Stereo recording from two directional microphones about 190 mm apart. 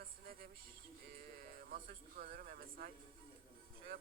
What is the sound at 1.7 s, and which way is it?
A man's voice, 50° right (ahead or behind).